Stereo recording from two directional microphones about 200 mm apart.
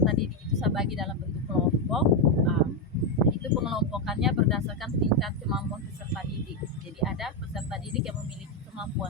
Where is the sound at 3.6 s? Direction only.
Centre (ahead or behind).